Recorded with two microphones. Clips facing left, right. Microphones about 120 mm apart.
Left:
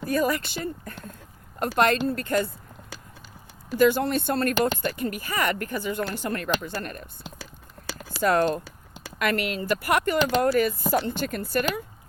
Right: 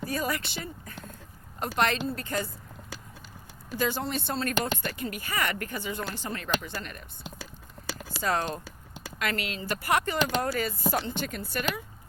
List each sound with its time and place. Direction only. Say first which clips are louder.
0.0 s speech: left 6 dB; 55° left (ahead or behind)
3.8 s speech: left 9 dB; 55° left (ahead or behind)
8.2 s speech: left 8 dB; 55° left (ahead or behind)